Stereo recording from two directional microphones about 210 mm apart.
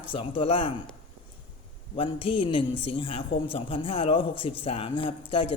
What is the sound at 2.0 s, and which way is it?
A man's voice, 25° left (ahead or behind).